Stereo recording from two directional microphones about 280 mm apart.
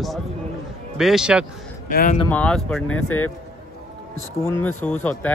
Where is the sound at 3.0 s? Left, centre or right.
Left.